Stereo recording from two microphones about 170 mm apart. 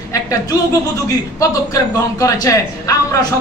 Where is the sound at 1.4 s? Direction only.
20° left (ahead or behind).